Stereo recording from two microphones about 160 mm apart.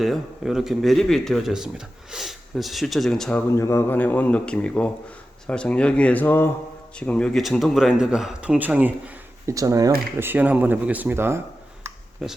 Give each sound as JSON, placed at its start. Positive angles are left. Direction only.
{"t": 0.0, "sound": "speech", "side_deg": 0}
{"t": 3.5, "sound": "a man's voice", "side_deg": 15}
{"t": 9.5, "sound": "speech", "side_deg": -20}
{"t": 12.2, "sound": "speech", "side_deg": 0}